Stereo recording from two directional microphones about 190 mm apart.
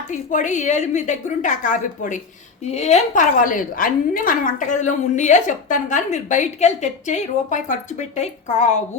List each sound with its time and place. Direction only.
0.1 s a woman's voice: 40° left (ahead or behind)